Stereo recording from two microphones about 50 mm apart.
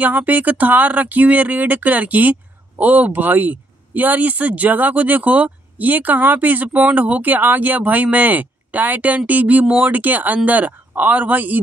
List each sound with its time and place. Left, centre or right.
0.0 s speech: right